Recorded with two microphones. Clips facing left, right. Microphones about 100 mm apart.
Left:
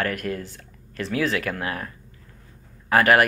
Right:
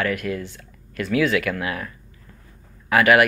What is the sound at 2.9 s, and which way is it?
Speech, 40° left (ahead or behind).